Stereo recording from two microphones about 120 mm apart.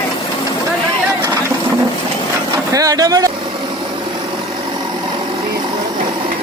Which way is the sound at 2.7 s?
30° right (ahead or behind).